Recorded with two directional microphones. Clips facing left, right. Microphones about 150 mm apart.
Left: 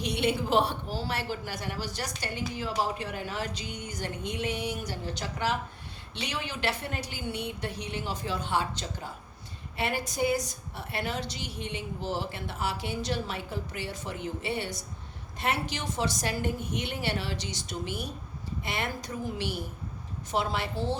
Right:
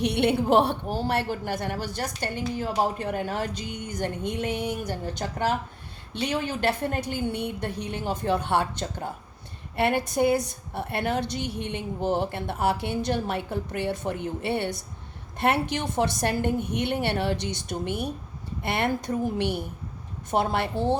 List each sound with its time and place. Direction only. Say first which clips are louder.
0.0 s a woman's voice: right 6 dB; 60° right (ahead or behind)